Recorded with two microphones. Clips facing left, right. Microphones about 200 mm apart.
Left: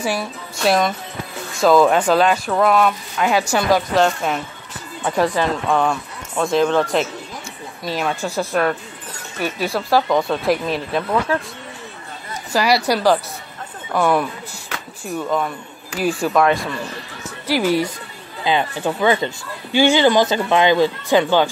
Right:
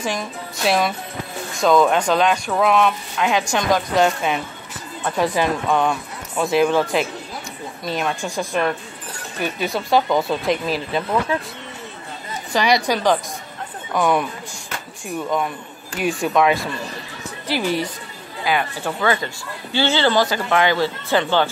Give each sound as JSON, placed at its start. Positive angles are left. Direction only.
{"t": 0.0, "sound": "speech", "side_deg": 10}
{"t": 0.6, "sound": "speech", "side_deg": 0}
{"t": 4.0, "sound": "speech", "side_deg": -5}
{"t": 5.7, "sound": "speech", "side_deg": 0}
{"t": 9.8, "sound": "speech", "side_deg": 0}
{"t": 12.5, "sound": "speech", "side_deg": 5}
{"t": 18.4, "sound": "speech", "side_deg": 25}